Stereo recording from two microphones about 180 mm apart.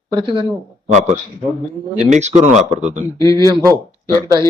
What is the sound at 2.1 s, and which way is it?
Speech, 40° right (ahead or behind).